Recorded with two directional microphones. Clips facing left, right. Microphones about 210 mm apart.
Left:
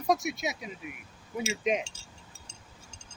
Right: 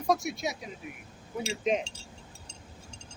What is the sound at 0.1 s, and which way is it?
Speech, 20° left (ahead or behind).